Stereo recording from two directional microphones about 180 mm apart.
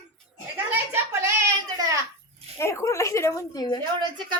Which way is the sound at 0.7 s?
15° right (ahead or behind).